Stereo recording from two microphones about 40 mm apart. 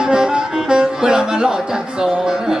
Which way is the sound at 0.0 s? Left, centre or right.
Centre.